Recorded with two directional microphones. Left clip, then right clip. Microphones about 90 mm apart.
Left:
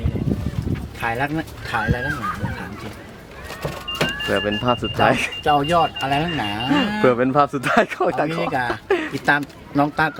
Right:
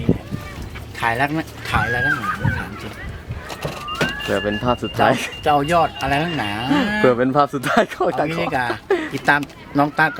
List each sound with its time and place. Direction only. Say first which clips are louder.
0.9 s speech: right 4 dB; 20° right (ahead or behind)
4.3 s speech: left 1 dB; 5° right (ahead or behind)